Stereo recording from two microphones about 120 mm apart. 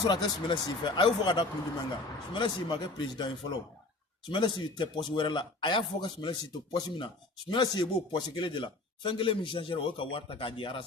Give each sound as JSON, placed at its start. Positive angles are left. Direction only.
{"t": 0.1, "sound": "speech", "side_deg": 40}